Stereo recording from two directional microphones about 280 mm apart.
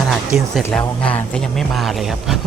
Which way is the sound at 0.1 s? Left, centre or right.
Centre.